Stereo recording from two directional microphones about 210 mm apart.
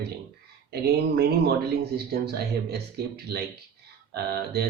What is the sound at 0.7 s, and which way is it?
Speech, 50° right (ahead or behind).